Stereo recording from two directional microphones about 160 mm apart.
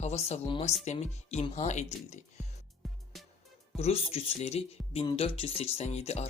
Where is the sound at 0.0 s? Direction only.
45° left (ahead or behind).